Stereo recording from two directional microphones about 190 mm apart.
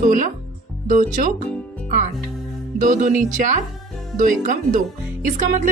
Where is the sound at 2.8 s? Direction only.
40° right (ahead or behind).